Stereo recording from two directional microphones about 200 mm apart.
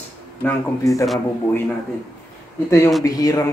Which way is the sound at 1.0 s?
Centre (ahead or behind).